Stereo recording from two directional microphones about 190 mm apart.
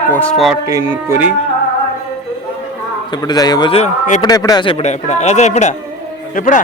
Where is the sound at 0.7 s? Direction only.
15° right (ahead or behind).